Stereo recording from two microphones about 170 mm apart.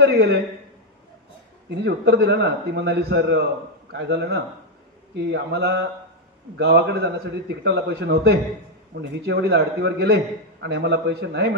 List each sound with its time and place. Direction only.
0.0 s a man's voice: 70° right (ahead or behind)
1.8 s a man's voice: 85° right
9.2 s a man's voice: 85° right